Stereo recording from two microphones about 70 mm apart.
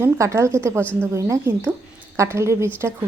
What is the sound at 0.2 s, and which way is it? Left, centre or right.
Speech, right.